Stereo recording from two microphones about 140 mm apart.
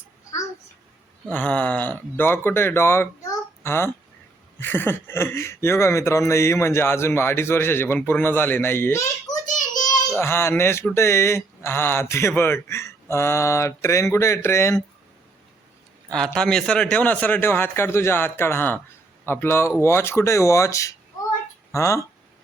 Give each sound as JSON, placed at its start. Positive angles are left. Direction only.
{"t": 1.3, "sound": "speech", "side_deg": 10}
{"t": 9.6, "sound": "a sound", "side_deg": 65}
{"t": 10.2, "sound": "speech", "side_deg": 15}
{"t": 16.0, "sound": "speech", "side_deg": 5}